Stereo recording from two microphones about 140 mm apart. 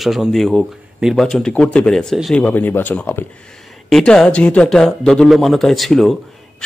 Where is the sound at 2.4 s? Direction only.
15° left (ahead or behind).